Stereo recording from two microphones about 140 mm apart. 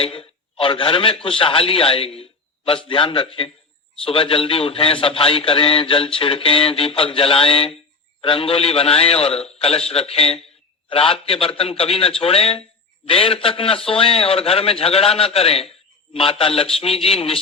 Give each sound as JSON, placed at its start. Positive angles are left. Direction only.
{"t": 0.0, "sound": "a man's voice", "side_deg": 40}